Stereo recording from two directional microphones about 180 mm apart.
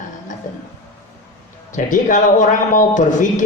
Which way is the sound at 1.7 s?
45° left (ahead or behind).